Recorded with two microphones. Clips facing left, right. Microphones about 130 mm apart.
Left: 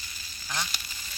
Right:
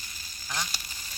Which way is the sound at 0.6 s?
40° right (ahead or behind).